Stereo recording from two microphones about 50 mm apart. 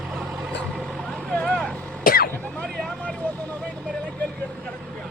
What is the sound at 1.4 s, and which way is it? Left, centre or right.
Vehicle, centre.